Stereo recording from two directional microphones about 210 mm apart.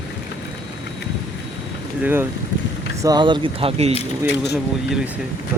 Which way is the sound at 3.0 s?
20° right (ahead or behind).